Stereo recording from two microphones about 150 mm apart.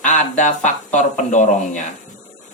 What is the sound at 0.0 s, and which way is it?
Speech, 55° left (ahead or behind).